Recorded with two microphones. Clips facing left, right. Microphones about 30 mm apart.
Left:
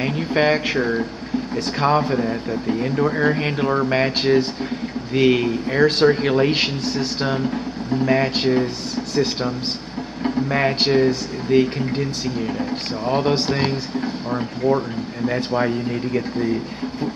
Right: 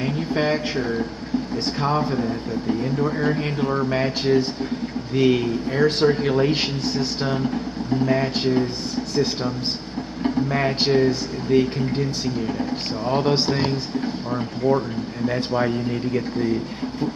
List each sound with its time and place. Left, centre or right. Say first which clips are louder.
0.0 s speech: left 3 dB; left
0.7 s speech: left 3 dB; centre
1.8 s speech: left 5 dB; left; by 7.6 s centre
8.1 s speech: left 4 dB; left